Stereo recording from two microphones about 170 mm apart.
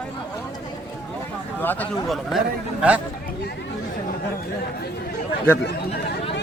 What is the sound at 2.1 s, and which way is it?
Speech, centre (ahead or behind).